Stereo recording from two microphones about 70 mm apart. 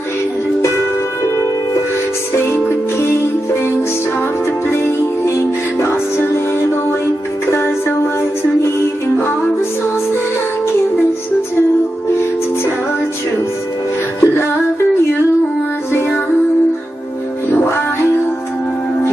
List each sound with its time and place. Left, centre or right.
2.3 s music: left
5.2 s music: left
14.2 s music: left
17.5 s music: left